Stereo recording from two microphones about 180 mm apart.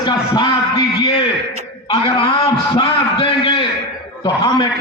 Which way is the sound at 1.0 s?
30° left (ahead or behind).